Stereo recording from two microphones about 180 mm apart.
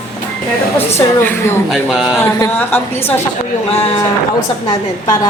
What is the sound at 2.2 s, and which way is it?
Speech, 10° left (ahead or behind).